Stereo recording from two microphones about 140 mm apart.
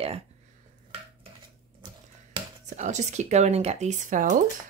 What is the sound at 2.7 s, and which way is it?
Speech, 60° right (ahead or behind).